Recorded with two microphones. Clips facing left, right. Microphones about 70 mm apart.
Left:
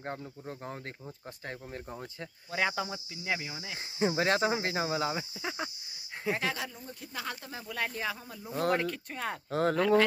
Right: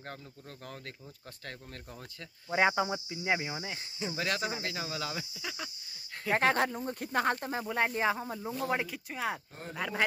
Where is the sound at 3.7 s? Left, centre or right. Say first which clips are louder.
Left 7 dB; left.